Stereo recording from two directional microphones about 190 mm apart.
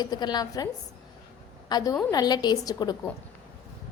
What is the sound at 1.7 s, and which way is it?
A woman's voice, 20° left (ahead or behind).